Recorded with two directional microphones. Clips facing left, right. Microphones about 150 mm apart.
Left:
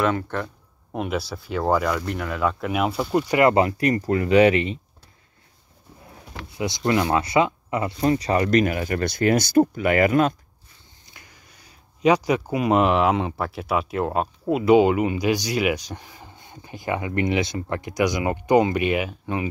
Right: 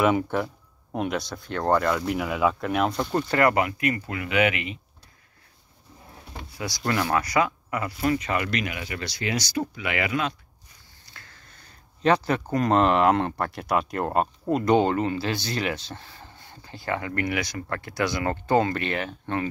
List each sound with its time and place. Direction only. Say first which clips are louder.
0.0 s speech: right 1 dB; 10° right (ahead or behind)
0.9 s speech: left 1 dB; 5° left (ahead or behind)
3.4 s speech: left 4 dB; 30° left (ahead or behind)
6.5 s speech: left 5 dB; 20° left (ahead or behind); by 10.3 s 45° left (ahead or behind)
11.1 s speech: even; 15° left (ahead or behind)